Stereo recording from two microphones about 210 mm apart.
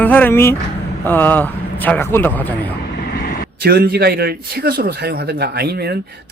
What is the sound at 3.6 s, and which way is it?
A man's voice, 50° right (ahead or behind).